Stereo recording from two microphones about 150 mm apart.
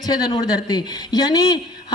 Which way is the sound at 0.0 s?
25° left (ahead or behind).